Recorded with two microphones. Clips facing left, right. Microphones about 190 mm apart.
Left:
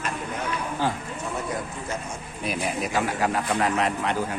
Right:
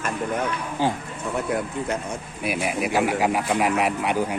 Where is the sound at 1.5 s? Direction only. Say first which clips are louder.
Right 5 dB; 60° right (ahead or behind).